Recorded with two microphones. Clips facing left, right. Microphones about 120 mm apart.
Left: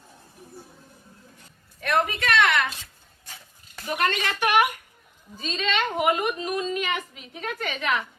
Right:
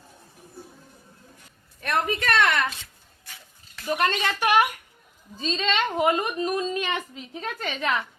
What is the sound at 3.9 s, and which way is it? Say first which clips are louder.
Speech: right 1 dB; 30° right (ahead or behind).